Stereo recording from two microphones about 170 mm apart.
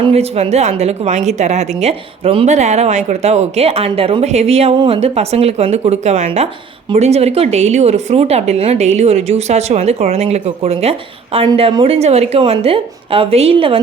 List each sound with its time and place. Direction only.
0.0 s a woman's voice: 35° right (ahead or behind)